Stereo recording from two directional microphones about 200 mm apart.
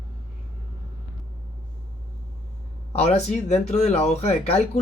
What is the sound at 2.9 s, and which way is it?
Speech, 30° left (ahead or behind).